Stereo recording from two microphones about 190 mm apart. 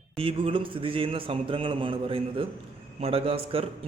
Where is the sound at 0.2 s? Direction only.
25° right (ahead or behind).